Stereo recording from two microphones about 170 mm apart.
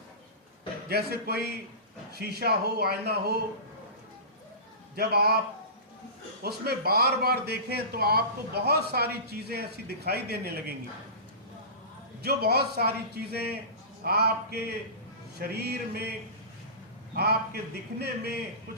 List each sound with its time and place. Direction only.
0.9 s a man's voice: 70° right (ahead or behind)
4.9 s a man's voice: 65° right (ahead or behind)
6.4 s a man's voice: 65° right (ahead or behind)
12.2 s a man's voice: 65° right (ahead or behind)
17.2 s a man's voice: 70° right (ahead or behind)